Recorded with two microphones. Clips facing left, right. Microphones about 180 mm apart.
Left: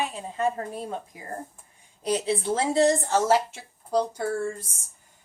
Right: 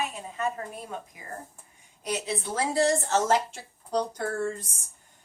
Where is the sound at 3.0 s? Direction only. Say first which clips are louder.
Left 2 dB; 10° left (ahead or behind).